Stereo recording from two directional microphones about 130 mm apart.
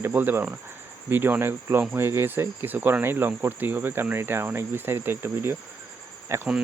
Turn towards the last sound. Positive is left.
turn(degrees=-20)  # may be behind; listen again after turning